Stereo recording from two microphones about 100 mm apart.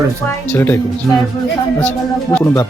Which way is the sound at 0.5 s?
20° left (ahead or behind).